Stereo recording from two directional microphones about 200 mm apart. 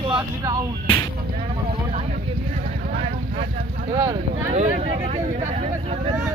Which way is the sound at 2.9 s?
35° right (ahead or behind).